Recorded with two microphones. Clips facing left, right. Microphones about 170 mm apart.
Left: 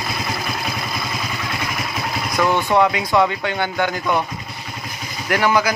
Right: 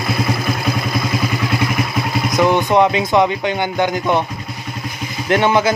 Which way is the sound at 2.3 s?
20° right (ahead or behind).